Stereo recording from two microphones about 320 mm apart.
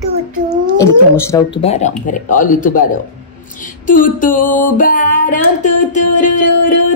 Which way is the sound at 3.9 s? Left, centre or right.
Left.